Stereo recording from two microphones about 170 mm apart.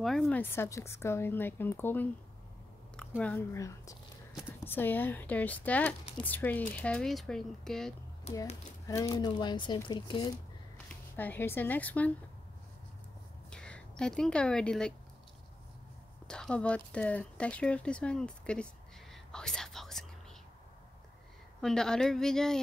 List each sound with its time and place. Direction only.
0.0 s speech: centre (ahead or behind)
0.4 s speech: 15° left (ahead or behind)
3.2 s speech: 10° left (ahead or behind)
3.5 s speech: 20° left (ahead or behind); by 7.9 s 5° left (ahead or behind)
8.3 s speech: 40° left (ahead or behind)
8.8 s speech: 20° left (ahead or behind)
11.1 s speech: 10° left (ahead or behind)
13.5 s speech: 5° left (ahead or behind)
16.3 s speech: 5° left (ahead or behind)
19.3 s whispering: 5° left (ahead or behind)
21.5 s speech: centre (ahead or behind)